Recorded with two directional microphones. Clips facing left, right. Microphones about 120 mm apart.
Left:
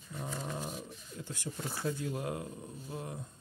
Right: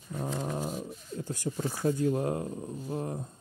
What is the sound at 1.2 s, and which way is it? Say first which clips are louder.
Speech: right 8 dB; 40° right (ahead or behind).